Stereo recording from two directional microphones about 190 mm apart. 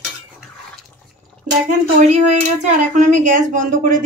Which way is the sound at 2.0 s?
35° right (ahead or behind).